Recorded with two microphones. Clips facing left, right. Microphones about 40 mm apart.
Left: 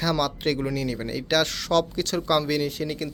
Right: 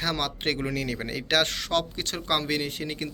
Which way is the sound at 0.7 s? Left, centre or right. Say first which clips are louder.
Left 2 dB; right.